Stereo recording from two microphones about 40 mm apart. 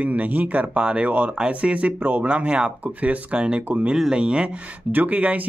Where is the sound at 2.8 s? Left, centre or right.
Right.